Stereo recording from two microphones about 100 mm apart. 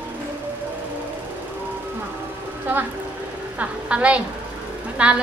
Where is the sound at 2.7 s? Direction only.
15° right (ahead or behind).